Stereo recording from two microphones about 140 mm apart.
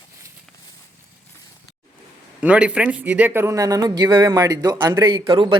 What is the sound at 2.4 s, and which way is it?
A man's voice, 10° right (ahead or behind).